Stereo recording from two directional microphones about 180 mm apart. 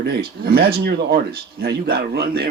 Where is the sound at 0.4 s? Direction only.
55° right (ahead or behind).